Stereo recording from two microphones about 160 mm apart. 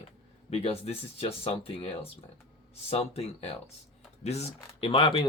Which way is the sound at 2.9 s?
40° left (ahead or behind).